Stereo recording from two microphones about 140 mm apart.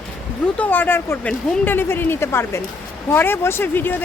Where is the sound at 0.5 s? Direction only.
10° left (ahead or behind).